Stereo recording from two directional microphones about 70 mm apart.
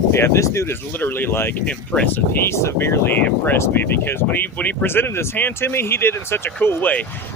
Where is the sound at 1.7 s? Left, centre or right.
Centre.